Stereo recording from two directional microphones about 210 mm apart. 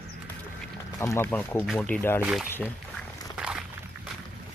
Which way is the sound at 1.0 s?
10° left (ahead or behind).